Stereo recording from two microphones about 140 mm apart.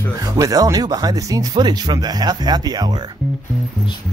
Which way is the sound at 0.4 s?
25° right (ahead or behind).